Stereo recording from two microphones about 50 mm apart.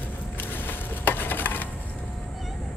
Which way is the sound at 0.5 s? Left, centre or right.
Left.